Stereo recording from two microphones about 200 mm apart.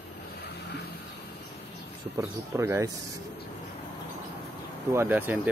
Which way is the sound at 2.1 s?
15° right (ahead or behind).